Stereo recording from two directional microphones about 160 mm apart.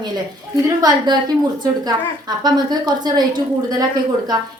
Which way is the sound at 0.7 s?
25° right (ahead or behind).